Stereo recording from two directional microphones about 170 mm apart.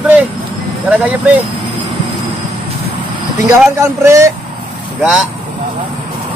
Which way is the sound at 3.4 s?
20° right (ahead or behind).